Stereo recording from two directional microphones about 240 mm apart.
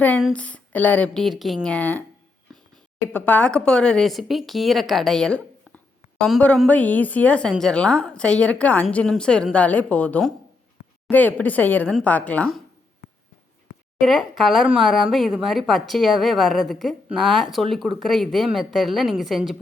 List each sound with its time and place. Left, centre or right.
0.0 s a woman's voice: centre
14.0 s speech: centre